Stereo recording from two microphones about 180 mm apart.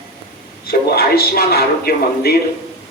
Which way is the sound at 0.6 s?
55° left (ahead or behind).